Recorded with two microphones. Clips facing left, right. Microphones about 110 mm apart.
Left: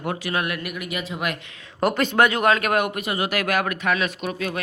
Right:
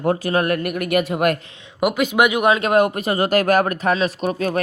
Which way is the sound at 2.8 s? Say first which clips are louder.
Right 6 dB; 35° right (ahead or behind).